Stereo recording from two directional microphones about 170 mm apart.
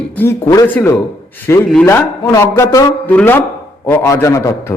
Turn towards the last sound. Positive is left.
turn(degrees=15)  # may be behind; listen again after turning